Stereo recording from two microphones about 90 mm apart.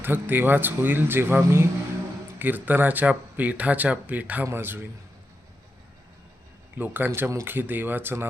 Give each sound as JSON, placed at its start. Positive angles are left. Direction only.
{"t": 0.0, "sound": "speech", "side_deg": -20}
{"t": 6.7, "sound": "speech", "side_deg": -20}